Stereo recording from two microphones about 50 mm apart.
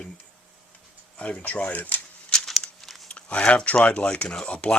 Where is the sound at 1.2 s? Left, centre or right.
Left.